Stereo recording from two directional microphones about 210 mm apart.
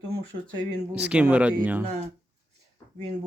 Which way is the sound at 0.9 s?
5° right (ahead or behind).